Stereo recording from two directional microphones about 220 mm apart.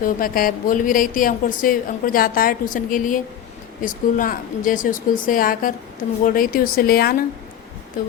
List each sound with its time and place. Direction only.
0.0 s a woman's voice: 40° left (ahead or behind)